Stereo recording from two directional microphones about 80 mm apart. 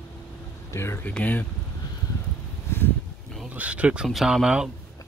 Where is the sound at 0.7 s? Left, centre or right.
Left.